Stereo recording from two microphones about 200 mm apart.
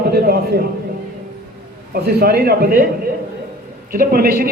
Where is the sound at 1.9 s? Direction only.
50° right (ahead or behind).